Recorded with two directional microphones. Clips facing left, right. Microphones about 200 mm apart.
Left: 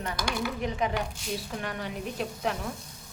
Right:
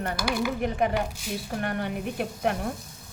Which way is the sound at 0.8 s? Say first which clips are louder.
Right 4 dB; 55° right (ahead or behind).